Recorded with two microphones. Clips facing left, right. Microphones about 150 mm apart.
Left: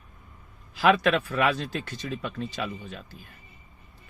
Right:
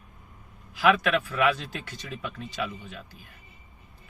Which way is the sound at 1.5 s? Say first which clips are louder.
Left 5 dB; 15° right (ahead or behind).